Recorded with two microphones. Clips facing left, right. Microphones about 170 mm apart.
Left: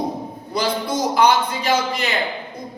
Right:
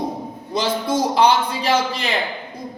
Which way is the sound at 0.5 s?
30° right (ahead or behind).